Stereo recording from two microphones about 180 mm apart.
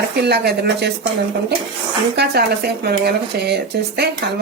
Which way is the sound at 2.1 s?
65° right (ahead or behind).